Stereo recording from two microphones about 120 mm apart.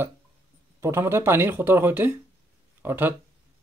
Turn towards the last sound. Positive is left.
turn(degrees=-15)  # may be behind; listen again after turning